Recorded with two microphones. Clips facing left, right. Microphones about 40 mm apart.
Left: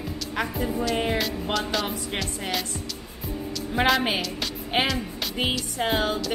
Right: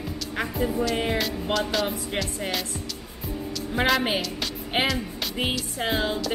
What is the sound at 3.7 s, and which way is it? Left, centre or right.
Speech, centre.